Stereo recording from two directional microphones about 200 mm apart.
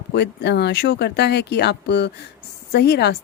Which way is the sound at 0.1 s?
60° left (ahead or behind).